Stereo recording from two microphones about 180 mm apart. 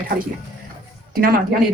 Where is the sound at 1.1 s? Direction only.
55° right (ahead or behind).